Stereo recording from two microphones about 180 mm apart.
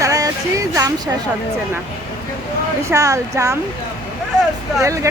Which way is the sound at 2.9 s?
15° right (ahead or behind).